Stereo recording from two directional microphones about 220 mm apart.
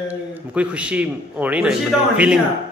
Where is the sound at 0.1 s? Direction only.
5° right (ahead or behind).